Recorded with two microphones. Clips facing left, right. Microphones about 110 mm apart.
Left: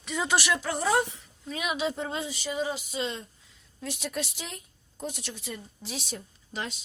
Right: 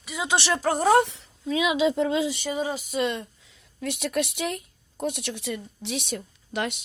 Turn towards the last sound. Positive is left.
turn(degrees=-65)  # may be behind; listen again after turning